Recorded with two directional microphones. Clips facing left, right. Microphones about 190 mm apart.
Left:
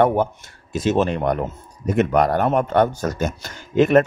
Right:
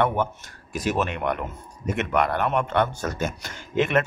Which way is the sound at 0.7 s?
25° left (ahead or behind).